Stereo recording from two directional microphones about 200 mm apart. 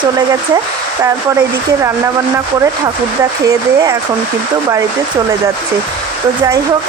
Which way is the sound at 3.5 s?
20° right (ahead or behind).